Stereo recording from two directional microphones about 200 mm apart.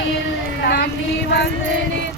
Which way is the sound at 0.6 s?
55° left (ahead or behind).